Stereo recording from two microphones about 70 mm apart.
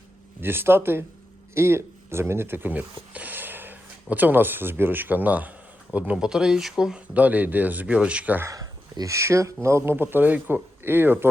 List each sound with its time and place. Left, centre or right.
0.4 s speech: right
6.1 s speech: centre
7.1 s speech: right
8.4 s speech: right